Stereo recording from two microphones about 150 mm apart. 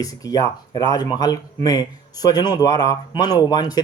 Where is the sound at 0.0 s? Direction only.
25° left (ahead or behind).